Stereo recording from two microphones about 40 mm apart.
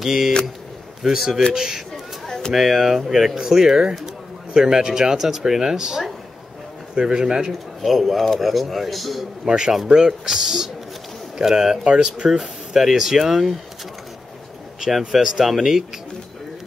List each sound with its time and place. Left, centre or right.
0.0 s a man's voice: centre
2.2 s a sound: centre
2.5 s speech: centre
7.8 s a man's voice: centre
9.7 s speech: centre
12.3 s speech: centre
14.8 s speech: centre